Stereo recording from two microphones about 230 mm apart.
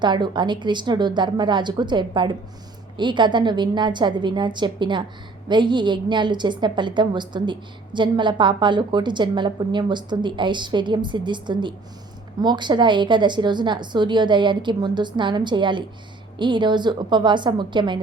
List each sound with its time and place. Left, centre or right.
0.0 s a woman's voice: centre